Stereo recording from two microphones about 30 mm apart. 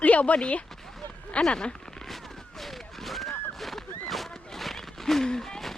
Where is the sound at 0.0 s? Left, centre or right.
Left.